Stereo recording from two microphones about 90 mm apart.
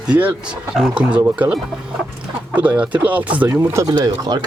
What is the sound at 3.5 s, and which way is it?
Speech, 30° right (ahead or behind).